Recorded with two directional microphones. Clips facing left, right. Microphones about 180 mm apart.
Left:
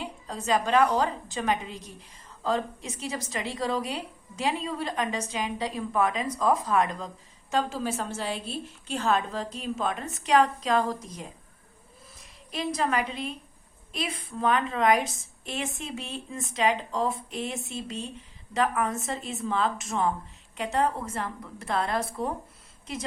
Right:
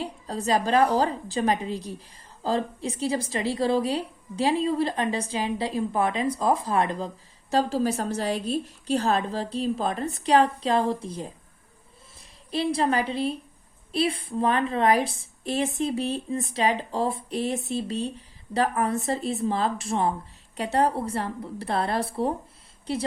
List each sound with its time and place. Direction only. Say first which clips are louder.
0.0 s a woman's voice: right 5 dB; 35° right (ahead or behind)